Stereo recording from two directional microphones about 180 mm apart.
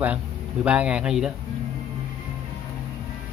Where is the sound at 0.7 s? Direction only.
5° right (ahead or behind).